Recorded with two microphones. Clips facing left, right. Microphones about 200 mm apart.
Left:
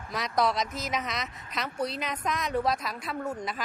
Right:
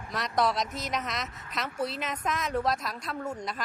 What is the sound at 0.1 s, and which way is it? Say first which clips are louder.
A woman's voice: even; centre (ahead or behind).